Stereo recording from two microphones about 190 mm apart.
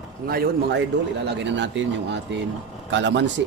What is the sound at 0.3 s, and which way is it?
A man's voice, 60° right (ahead or behind).